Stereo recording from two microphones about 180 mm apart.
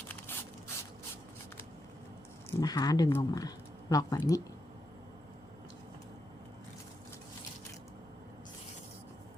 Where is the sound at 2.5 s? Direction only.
20° left (ahead or behind).